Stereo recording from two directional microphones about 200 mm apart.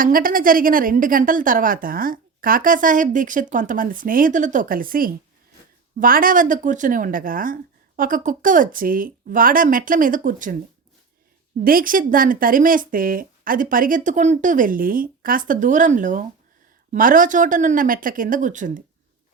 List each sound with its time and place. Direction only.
0.0 s a woman's voice: 45° right (ahead or behind)
11.6 s a woman's voice: 45° right (ahead or behind)